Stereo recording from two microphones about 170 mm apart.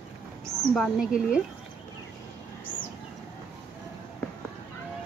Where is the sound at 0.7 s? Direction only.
Centre (ahead or behind).